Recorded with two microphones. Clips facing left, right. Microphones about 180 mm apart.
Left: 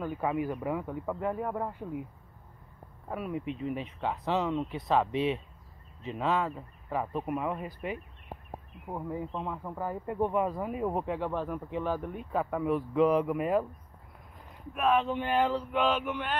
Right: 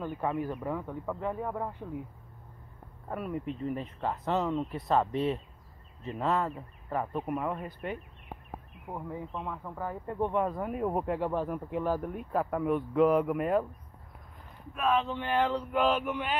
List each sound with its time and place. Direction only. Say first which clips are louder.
0.0 s speech: left 1 dB; 5° left (ahead or behind)
3.1 s speech: even; 5° left (ahead or behind)
14.8 s speech: left 2 dB; 5° left (ahead or behind)
15.4 s speech: even; centre (ahead or behind)